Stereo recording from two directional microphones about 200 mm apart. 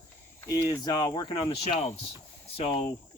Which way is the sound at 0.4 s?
15° left (ahead or behind).